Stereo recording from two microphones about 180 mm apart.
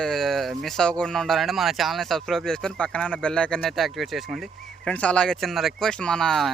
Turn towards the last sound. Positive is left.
turn(degrees=0)  # may be behind; listen again after turning